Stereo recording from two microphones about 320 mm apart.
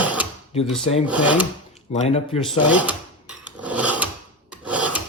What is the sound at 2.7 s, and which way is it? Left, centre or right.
Filing, centre.